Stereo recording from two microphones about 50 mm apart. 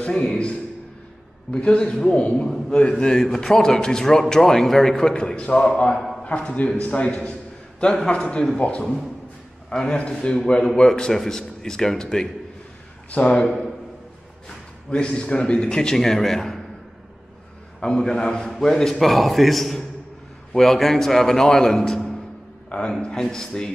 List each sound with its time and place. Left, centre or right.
0.0 s a man's voice: centre
13.1 s a man's voice: left
14.9 s a man's voice: centre
17.7 s a man's voice: centre